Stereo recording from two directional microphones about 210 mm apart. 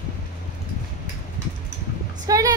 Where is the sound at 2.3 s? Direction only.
15° right (ahead or behind).